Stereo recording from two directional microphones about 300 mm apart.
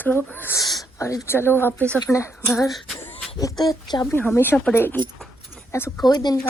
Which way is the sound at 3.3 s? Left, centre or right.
Centre.